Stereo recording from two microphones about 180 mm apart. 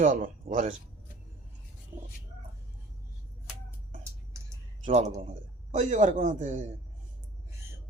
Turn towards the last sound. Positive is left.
turn(degrees=-40)  # may be behind; listen again after turning